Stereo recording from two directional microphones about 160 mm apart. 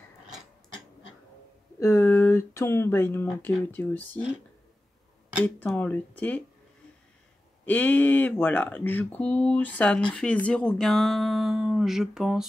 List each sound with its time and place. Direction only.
1.8 s speech: 15° left (ahead or behind)
5.8 s speech: 10° left (ahead or behind)
7.6 s speech: 10° left (ahead or behind)